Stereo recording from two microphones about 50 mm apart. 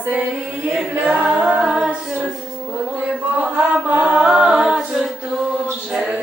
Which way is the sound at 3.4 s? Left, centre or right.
Right.